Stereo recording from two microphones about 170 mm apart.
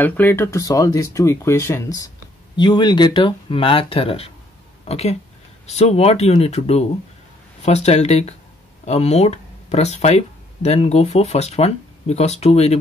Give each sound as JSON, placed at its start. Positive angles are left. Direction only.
{"t": 0.0, "sound": "speech", "side_deg": 10}